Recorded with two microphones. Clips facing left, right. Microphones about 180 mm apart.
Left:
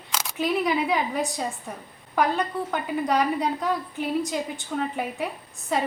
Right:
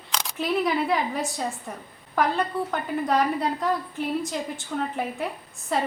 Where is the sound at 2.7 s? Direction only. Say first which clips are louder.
Left 1 dB; centre (ahead or behind).